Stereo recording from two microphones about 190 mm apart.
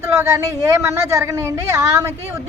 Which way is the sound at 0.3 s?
15° right (ahead or behind).